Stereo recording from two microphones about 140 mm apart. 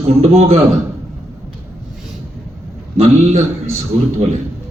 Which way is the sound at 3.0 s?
50° right (ahead or behind).